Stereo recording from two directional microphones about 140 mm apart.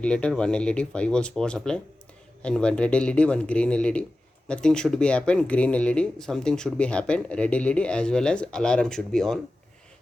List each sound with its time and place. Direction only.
0.0 s speech: 5° left (ahead or behind)